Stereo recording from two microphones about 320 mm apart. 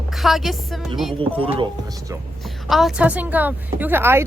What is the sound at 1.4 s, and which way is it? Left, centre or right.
Speech, centre.